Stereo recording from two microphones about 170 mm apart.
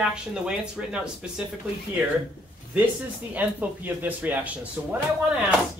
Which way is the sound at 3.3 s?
10° right (ahead or behind).